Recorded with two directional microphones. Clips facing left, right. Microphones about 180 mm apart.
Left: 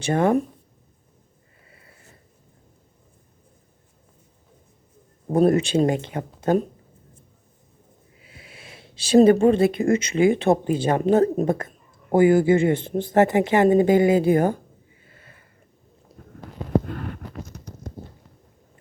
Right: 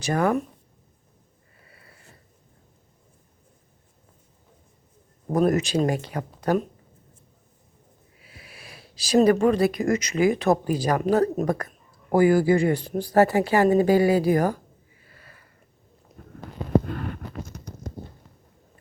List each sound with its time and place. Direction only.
0.0 s speech: 25° left (ahead or behind)
1.6 s a sound: 25° left (ahead or behind)
5.3 s speech: 30° left (ahead or behind)
8.2 s speech: 25° left (ahead or behind)
15.0 s sniff: 25° left (ahead or behind)